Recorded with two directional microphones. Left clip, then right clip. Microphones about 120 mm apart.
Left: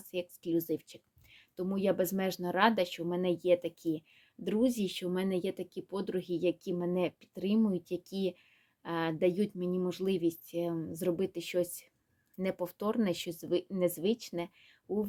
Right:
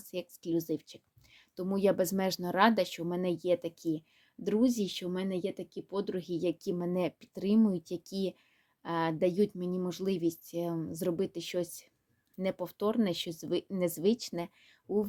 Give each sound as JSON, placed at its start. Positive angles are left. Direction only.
{"t": 0.1, "sound": "speech", "side_deg": -35}